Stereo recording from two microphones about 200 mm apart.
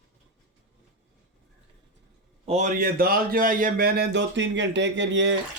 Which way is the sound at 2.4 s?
35° right (ahead or behind).